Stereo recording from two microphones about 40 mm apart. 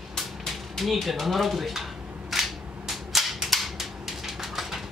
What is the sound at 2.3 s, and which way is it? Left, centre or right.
Cap gun, centre.